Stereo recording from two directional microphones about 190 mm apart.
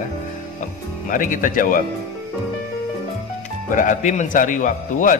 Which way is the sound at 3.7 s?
45° left (ahead or behind).